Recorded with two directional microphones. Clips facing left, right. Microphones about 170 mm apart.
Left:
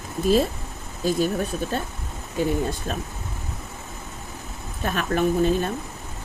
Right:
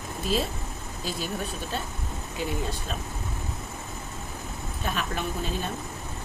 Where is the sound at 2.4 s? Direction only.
45° left (ahead or behind).